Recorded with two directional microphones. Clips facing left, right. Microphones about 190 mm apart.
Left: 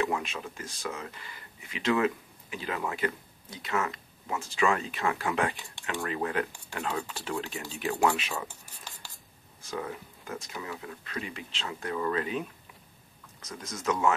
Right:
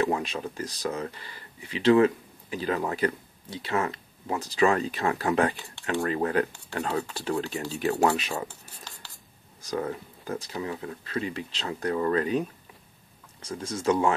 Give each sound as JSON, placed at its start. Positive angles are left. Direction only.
{"t": 0.0, "sound": "speech", "side_deg": -35}
{"t": 8.5, "sound": "cutlery", "side_deg": 15}
{"t": 9.6, "sound": "speech", "side_deg": -40}
{"t": 13.4, "sound": "speech", "side_deg": -30}